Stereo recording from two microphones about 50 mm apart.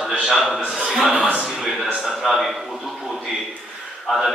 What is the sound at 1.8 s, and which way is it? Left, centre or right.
Speech, centre.